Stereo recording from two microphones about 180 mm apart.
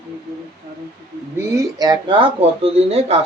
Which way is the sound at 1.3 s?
15° right (ahead or behind).